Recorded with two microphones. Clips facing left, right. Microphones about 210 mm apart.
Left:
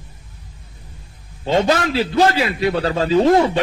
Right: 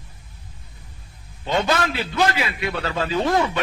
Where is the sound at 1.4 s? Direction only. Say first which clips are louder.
Left 5 dB; 30° left (ahead or behind).